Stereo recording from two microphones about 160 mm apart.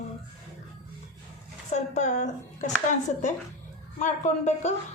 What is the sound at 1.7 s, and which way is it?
Speech, 45° left (ahead or behind).